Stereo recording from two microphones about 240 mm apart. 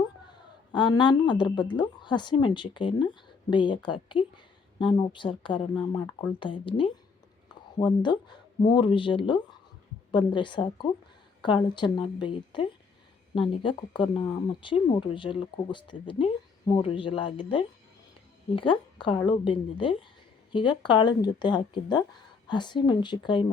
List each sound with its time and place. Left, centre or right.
0.7 s speech: centre
7.4 s a sound: centre
8.0 s speech: centre